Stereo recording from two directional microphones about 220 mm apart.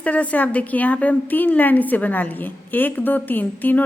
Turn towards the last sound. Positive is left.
turn(degrees=10)  # may be behind; listen again after turning